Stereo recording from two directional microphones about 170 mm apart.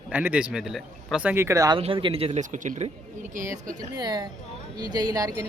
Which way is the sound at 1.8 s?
30° right (ahead or behind).